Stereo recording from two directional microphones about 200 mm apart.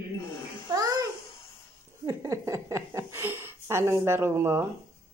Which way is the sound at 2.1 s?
15° right (ahead or behind).